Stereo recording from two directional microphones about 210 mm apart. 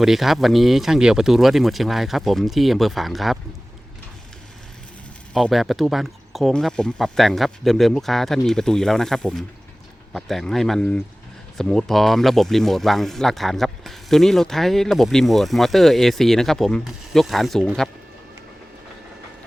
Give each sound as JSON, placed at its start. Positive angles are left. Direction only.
{"t": 0.0, "sound": "speech", "side_deg": 0}
{"t": 5.3, "sound": "speech", "side_deg": 0}